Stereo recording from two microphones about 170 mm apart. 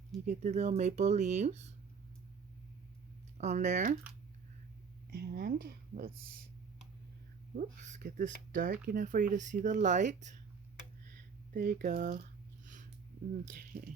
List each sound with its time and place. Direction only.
0.3 s speech: 45° right (ahead or behind)
3.3 s speech: 45° right (ahead or behind)
5.1 s speech: 65° right (ahead or behind)
7.5 s speech: 45° right (ahead or behind)
11.5 s speech: 55° right (ahead or behind)
13.4 s speech: 50° right (ahead or behind)